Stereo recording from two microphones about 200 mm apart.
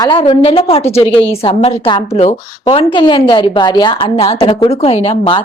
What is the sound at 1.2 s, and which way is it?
A woman's voice, 30° left (ahead or behind).